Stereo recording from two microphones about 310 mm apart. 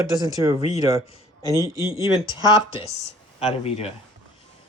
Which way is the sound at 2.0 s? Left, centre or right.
Centre.